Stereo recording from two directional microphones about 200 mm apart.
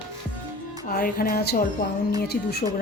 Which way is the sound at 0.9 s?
45° left (ahead or behind).